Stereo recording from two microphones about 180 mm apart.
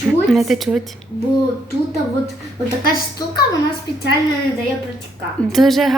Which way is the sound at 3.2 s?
20° left (ahead or behind).